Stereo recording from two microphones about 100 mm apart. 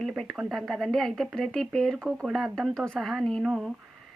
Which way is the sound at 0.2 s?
Centre (ahead or behind).